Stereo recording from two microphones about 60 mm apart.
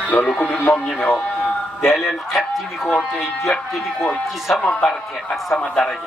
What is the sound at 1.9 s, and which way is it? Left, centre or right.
Speech, centre.